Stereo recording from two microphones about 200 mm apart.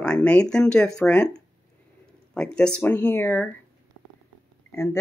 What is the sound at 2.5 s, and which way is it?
Speech, 5° left (ahead or behind).